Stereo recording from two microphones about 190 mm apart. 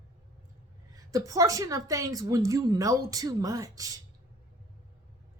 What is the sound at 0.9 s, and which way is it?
A woman's voice, 15° right (ahead or behind).